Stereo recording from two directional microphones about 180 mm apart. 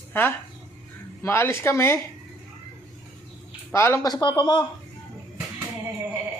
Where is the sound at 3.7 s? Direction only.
15° left (ahead or behind).